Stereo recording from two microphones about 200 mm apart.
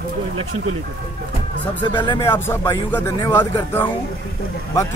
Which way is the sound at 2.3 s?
10° left (ahead or behind).